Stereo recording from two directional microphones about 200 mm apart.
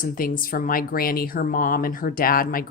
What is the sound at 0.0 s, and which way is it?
A woman's voice, 45° left (ahead or behind).